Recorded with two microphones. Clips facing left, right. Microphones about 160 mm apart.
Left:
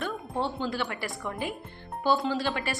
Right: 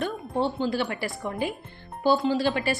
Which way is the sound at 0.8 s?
25° right (ahead or behind).